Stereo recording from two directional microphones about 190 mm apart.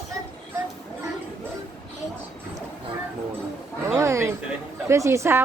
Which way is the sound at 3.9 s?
15° right (ahead or behind).